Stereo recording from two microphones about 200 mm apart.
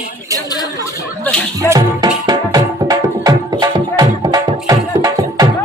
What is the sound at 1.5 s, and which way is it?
Music, 20° right (ahead or behind).